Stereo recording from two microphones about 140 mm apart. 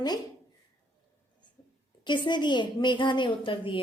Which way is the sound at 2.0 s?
35° left (ahead or behind).